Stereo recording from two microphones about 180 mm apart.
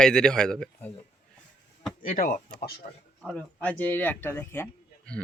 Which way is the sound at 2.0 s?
50° left (ahead or behind).